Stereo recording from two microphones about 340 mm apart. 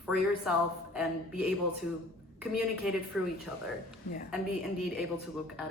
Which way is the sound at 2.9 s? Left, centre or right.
Centre.